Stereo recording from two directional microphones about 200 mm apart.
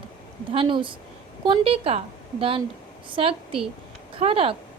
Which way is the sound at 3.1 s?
25° right (ahead or behind).